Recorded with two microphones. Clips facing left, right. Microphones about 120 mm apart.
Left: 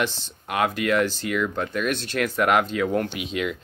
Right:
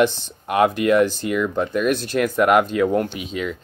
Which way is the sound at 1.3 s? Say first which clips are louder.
Right 5 dB; 10° right (ahead or behind).